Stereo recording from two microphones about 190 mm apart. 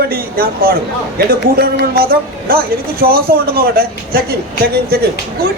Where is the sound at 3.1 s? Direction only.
50° right (ahead or behind).